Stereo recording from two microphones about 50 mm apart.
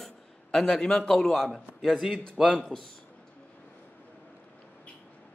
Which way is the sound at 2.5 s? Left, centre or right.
Centre.